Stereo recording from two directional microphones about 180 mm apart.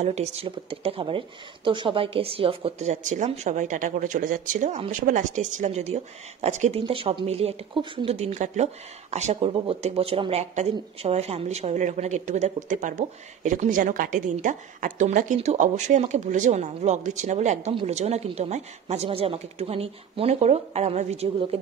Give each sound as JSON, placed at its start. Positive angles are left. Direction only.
{"t": 0.0, "sound": "a woman's voice", "side_deg": -35}